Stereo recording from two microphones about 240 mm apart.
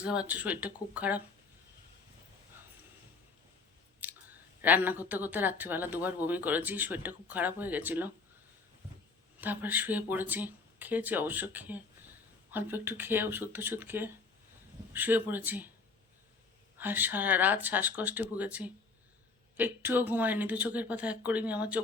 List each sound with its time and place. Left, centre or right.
0.0 s speech: centre
4.0 s speech: centre
9.4 s speech: centre
16.7 s speech: centre